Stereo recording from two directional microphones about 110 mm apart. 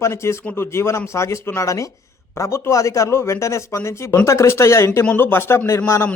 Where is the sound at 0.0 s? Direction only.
25° left (ahead or behind).